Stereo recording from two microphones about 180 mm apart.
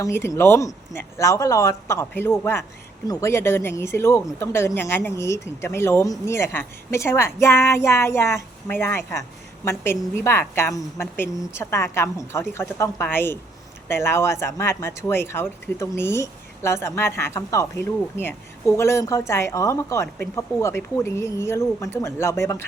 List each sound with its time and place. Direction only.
0.0 s speech: 15° left (ahead or behind)